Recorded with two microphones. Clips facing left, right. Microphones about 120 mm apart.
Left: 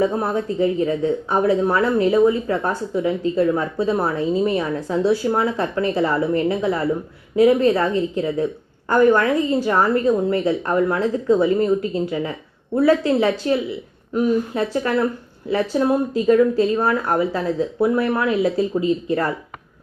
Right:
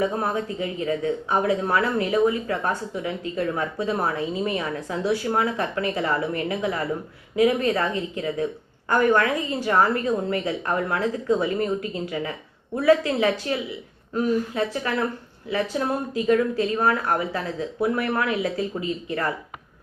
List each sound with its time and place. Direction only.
0.0 s a woman's voice: 30° left (ahead or behind)